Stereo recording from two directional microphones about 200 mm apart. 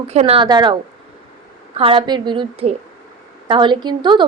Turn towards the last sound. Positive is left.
turn(degrees=-25)  # may be behind; listen again after turning